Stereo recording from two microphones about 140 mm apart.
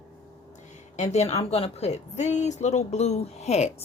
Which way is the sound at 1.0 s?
50° left (ahead or behind).